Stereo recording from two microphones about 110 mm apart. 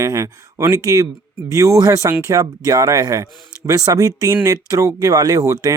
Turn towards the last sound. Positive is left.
turn(degrees=-30)  # may be behind; listen again after turning